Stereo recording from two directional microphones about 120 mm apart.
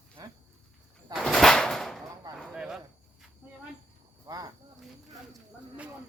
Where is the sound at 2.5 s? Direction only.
5° right (ahead or behind).